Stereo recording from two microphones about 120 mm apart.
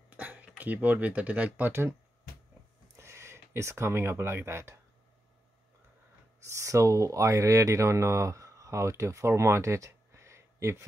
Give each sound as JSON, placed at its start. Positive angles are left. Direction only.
{"t": 0.1, "sound": "speech", "side_deg": -15}
{"t": 3.0, "sound": "speech", "side_deg": -20}
{"t": 6.4, "sound": "speech", "side_deg": -25}